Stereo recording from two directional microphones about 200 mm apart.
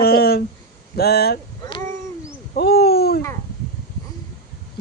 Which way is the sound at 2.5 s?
50° left (ahead or behind).